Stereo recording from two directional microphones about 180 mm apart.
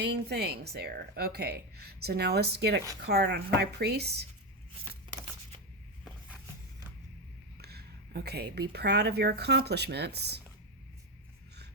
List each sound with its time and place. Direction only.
0.0 s speech: 70° right (ahead or behind)
4.9 s a sound: 30° right (ahead or behind)
7.6 s speech: 60° right (ahead or behind)